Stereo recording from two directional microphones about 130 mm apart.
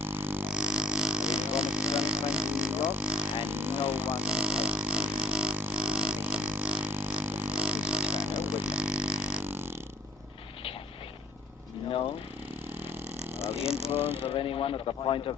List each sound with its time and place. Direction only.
0.0 s didgeridoo: 15° right (ahead or behind)
13.9 s mechanisms: 15° right (ahead or behind)
14.2 s speech: 45° left (ahead or behind)